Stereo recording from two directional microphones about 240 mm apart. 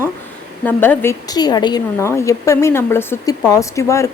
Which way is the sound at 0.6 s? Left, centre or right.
Centre.